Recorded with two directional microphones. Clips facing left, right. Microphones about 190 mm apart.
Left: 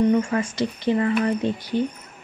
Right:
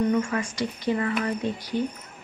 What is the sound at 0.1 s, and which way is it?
Speech, 30° left (ahead or behind).